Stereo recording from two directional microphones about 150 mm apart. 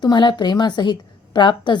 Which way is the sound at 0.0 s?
30° left (ahead or behind).